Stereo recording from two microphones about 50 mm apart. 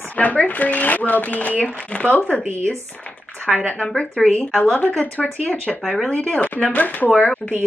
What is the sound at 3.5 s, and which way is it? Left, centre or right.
Speech, centre.